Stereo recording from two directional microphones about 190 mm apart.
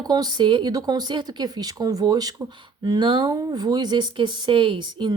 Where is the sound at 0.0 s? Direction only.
20° right (ahead or behind).